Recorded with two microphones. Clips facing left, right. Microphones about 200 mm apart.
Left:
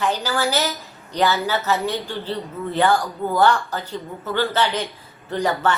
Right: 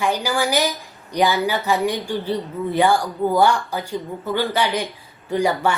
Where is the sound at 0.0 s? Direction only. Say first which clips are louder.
Right 1 dB; 10° right (ahead or behind).